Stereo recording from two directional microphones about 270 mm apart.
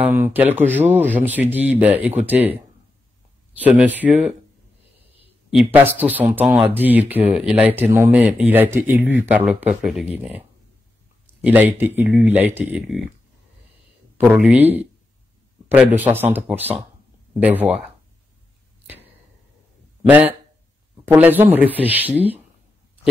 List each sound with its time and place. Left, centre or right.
0.1 s speech: centre
5.5 s speech: centre
11.4 s speech: centre
14.1 s speech: centre
15.7 s speech: centre
20.1 s speech: centre